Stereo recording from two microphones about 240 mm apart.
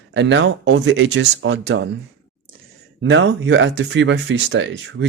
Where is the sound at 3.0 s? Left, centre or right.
Right.